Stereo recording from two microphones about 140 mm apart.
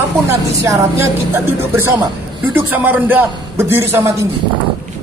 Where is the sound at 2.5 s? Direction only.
15° right (ahead or behind).